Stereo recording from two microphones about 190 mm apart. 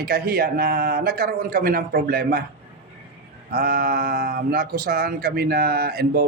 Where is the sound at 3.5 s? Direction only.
50° right (ahead or behind).